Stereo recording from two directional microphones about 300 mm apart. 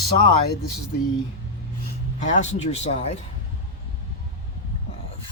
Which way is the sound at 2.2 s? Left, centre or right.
Left.